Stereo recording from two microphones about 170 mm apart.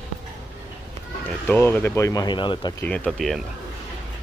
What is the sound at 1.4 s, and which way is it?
Speech, 10° left (ahead or behind).